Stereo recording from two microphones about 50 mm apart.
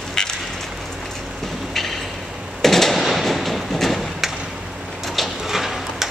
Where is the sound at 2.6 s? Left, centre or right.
Centre.